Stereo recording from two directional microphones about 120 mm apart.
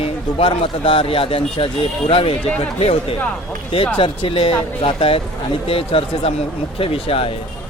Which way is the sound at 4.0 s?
50° left (ahead or behind).